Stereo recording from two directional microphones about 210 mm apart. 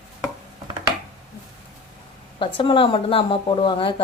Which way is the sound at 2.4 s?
25° left (ahead or behind).